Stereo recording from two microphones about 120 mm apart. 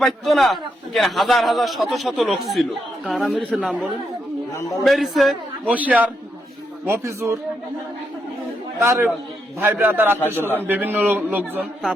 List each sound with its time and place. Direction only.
0.0 s a man's voice: centre (ahead or behind)
5.7 s a man's voice: 15° right (ahead or behind)
8.8 s a man's voice: 20° right (ahead or behind)
10.2 s a man's voice: 15° left (ahead or behind)
10.6 s a man's voice: 15° right (ahead or behind)